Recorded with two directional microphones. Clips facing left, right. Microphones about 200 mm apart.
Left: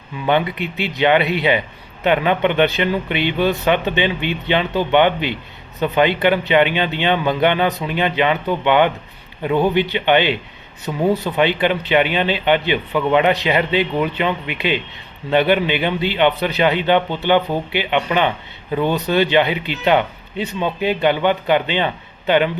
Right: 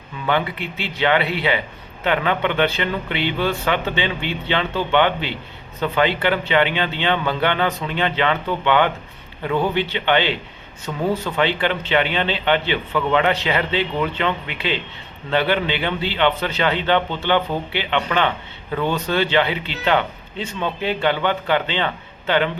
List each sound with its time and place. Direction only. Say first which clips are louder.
0.3 s speech: left 4 dB; 20° left (ahead or behind)